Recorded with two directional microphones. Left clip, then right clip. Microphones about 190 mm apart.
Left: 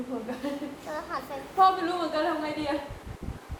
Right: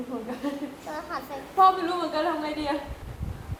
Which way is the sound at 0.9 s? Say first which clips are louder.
Even; centre (ahead or behind).